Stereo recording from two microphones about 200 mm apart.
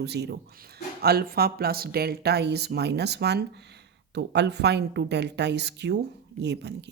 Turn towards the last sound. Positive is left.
turn(degrees=-60)  # may be behind; listen again after turning